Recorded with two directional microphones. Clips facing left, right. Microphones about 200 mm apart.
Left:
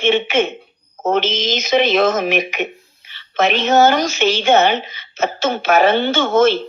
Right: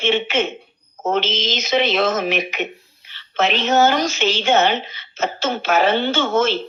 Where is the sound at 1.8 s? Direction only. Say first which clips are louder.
Left 3 dB; 50° left (ahead or behind).